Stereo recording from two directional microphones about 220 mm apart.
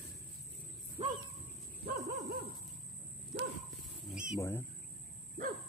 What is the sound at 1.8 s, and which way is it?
Dog, 45° right (ahead or behind).